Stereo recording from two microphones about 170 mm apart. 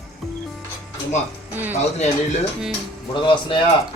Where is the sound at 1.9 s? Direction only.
40° left (ahead or behind).